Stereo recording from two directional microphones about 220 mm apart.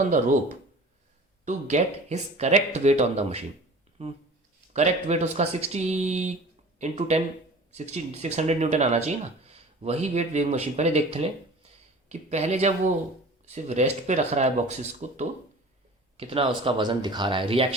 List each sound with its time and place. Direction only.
1.5 s speech: 30° right (ahead or behind)